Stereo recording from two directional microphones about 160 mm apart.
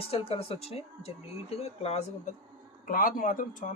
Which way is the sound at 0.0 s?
35° left (ahead or behind).